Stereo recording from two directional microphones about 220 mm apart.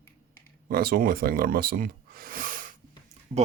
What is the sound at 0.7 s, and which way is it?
Speech, 40° right (ahead or behind).